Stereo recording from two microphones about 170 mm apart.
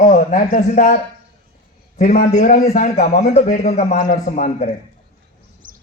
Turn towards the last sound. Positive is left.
turn(degrees=45)  # may be behind; listen again after turning